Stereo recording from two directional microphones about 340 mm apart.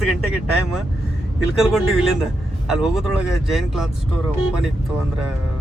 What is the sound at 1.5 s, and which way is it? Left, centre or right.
Speech, centre.